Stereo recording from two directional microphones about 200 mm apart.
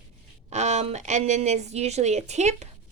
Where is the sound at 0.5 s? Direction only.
35° right (ahead or behind).